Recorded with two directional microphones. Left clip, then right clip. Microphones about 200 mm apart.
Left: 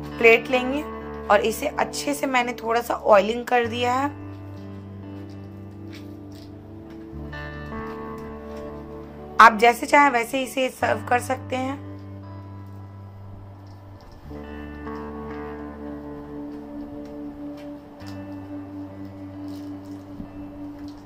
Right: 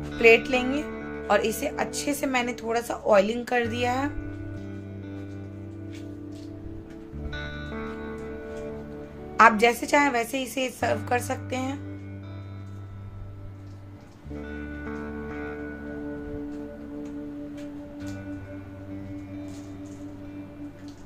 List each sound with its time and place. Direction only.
0.2 s a woman's voice: 5° right (ahead or behind)
9.4 s a woman's voice: 5° right (ahead or behind)